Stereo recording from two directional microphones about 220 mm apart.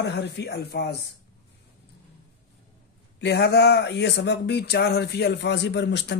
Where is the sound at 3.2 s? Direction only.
50° left (ahead or behind).